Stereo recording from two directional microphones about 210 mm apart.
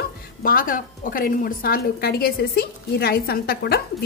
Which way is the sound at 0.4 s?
40° left (ahead or behind).